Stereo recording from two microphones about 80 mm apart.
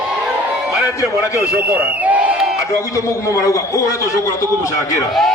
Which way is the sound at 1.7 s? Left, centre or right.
Centre.